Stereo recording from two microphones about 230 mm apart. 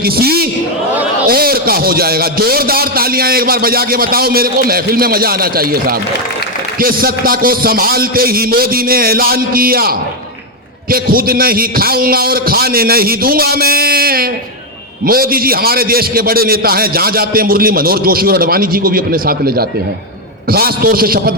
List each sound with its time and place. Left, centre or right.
0.0 s a man's voice: right